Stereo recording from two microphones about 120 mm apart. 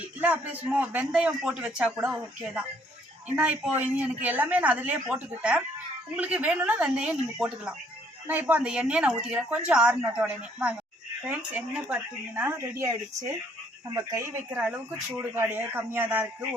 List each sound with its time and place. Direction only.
0.0 s a man's voice: 10° right (ahead or behind)
14.6 s a man's voice: 10° right (ahead or behind)